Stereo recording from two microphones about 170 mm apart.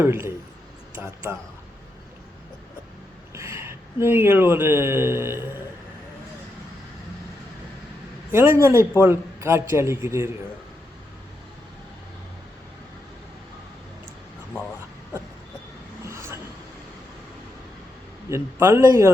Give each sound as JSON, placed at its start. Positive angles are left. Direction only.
{"t": 0.0, "sound": "a man's voice", "side_deg": -15}
{"t": 3.3, "sound": "speech", "side_deg": -15}
{"t": 8.3, "sound": "a man's voice", "side_deg": -15}
{"t": 16.0, "sound": "a sound", "side_deg": -15}
{"t": 18.3, "sound": "a man's voice", "side_deg": -15}